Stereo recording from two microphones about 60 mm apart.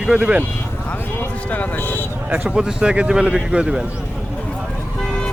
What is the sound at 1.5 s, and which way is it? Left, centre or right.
Speech, left.